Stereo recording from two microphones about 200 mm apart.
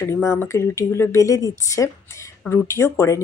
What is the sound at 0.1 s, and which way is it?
A woman's voice, 15° left (ahead or behind).